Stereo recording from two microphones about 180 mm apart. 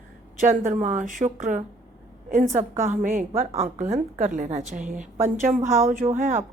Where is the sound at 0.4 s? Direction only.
45° right (ahead or behind).